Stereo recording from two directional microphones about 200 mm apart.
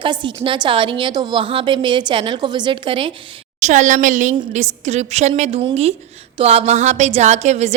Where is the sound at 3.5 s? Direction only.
35° right (ahead or behind).